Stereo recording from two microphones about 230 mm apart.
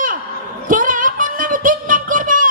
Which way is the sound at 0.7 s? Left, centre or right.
Right.